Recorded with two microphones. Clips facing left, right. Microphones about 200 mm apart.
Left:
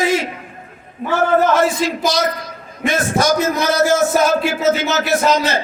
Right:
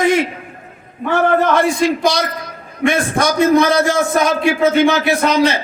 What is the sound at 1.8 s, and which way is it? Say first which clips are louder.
Speech: right 5 dB; 60° right (ahead or behind).